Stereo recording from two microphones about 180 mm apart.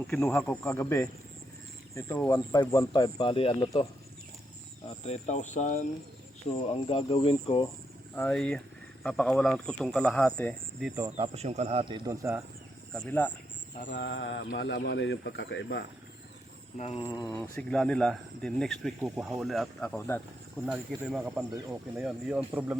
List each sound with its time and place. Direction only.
0.1 s speech: 10° left (ahead or behind); by 3.7 s 30° left (ahead or behind)
5.0 s speech: 40° left (ahead or behind)
6.5 s speech: 35° left (ahead or behind)
8.1 s speech: 10° left (ahead or behind)
10.9 s speech: 20° right (ahead or behind)
11.3 s speech: 35° right (ahead or behind); by 12.4 s 15° right (ahead or behind)
12.9 s speech: 10° left (ahead or behind)
14.0 s speech: 75° left (ahead or behind)
16.7 s speech: 35° left (ahead or behind)
17.6 s speech: 5° left (ahead or behind)